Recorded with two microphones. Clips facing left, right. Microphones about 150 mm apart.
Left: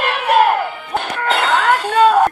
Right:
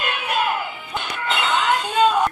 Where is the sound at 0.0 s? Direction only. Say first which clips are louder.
Left 9 dB; 65° left (ahead or behind).